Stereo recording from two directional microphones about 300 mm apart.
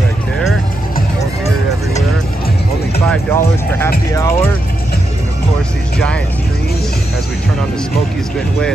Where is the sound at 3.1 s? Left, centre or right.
Centre.